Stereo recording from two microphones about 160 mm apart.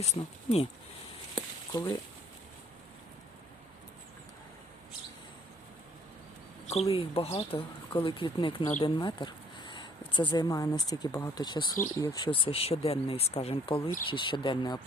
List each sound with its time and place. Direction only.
0.0 s speech: 45° left (ahead or behind)
1.7 s speech: 25° left (ahead or behind)
6.7 s speech: 40° left (ahead or behind)